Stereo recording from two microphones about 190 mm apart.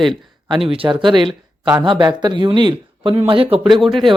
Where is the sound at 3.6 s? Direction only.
Centre (ahead or behind).